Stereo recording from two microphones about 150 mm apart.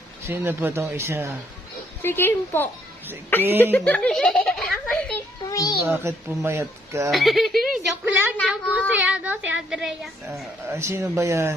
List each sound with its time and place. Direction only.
0.3 s speech: 15° right (ahead or behind)
2.0 s a woman's voice: 15° left (ahead or behind)
3.8 s a sound: 10° left (ahead or behind)
5.5 s a sound: 25° left (ahead or behind)
5.8 s speech: 15° right (ahead or behind)
7.1 s a child's voice: centre (ahead or behind)
8.0 s a child's voice: 10° right (ahead or behind)
10.7 s speech: 20° right (ahead or behind)